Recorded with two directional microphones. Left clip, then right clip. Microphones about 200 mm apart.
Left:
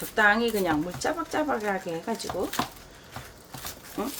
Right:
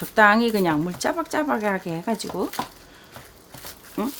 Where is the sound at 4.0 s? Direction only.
50° right (ahead or behind).